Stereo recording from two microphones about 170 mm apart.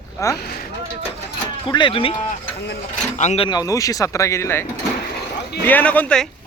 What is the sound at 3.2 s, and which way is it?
Speech, 40° left (ahead or behind).